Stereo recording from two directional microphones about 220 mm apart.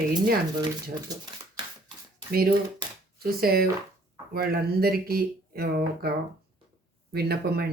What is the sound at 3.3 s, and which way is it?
Speech, 45° right (ahead or behind).